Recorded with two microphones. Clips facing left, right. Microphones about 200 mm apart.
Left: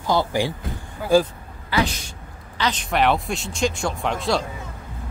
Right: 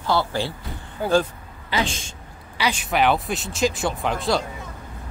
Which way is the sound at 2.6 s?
10° right (ahead or behind).